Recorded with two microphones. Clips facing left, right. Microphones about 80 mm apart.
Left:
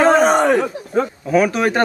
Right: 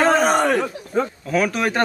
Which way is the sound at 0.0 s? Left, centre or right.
Centre.